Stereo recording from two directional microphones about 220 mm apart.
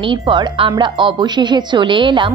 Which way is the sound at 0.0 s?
20° right (ahead or behind).